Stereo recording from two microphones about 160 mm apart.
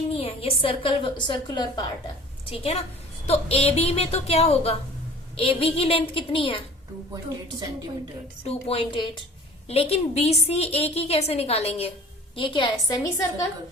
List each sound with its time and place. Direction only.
0.1 s a woman's voice: 40° left (ahead or behind)
2.5 s a woman's voice: 40° left (ahead or behind)
8.4 s a woman's voice: 35° left (ahead or behind)